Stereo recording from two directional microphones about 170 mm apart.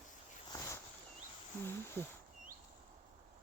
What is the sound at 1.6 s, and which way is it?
Speech, 15° left (ahead or behind).